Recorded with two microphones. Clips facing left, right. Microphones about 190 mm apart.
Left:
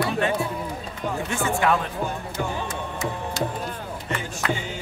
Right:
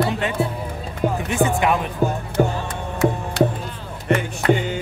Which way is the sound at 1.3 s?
20° right (ahead or behind).